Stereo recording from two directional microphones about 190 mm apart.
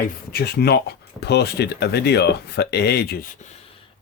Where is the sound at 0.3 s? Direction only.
55° left (ahead or behind).